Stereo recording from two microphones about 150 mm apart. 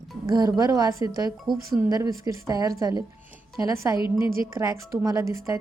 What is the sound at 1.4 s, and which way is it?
Speech, centre (ahead or behind).